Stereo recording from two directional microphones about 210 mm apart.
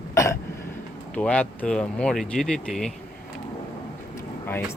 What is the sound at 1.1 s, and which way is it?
Speech, 5° left (ahead or behind).